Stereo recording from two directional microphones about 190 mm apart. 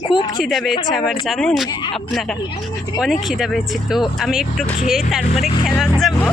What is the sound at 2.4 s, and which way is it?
Speech, 20° left (ahead or behind).